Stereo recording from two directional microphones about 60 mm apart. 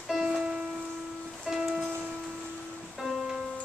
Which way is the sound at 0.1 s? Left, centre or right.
Centre.